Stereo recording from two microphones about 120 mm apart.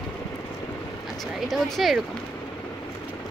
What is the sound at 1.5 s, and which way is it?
Speech, centre (ahead or behind).